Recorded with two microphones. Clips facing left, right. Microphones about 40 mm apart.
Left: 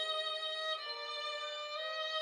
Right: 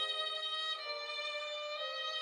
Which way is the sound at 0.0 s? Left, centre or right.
Right.